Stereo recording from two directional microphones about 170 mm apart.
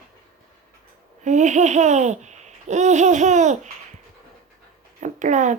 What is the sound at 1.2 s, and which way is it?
Laughter, 45° right (ahead or behind).